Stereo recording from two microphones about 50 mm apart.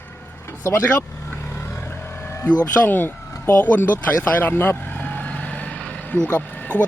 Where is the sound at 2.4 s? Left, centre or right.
Left.